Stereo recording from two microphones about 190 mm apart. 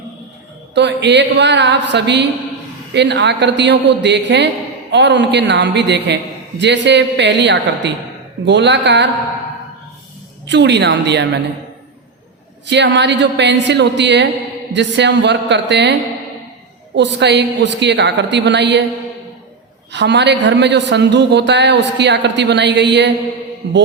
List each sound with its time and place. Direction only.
0.7 s a woman's voice: 65° right (ahead or behind)
10.5 s a man's voice: 65° right (ahead or behind)
12.6 s a woman's voice: 65° right (ahead or behind)
19.9 s a man's voice: 65° right (ahead or behind)